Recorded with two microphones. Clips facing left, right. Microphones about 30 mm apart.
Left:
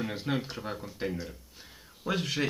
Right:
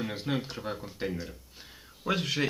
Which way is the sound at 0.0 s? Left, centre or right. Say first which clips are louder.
Even; centre.